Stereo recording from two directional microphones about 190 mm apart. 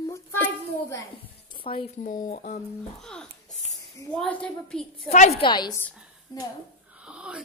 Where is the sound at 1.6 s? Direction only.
30° left (ahead or behind).